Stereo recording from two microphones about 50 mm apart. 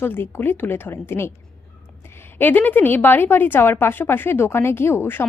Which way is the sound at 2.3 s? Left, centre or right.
Left.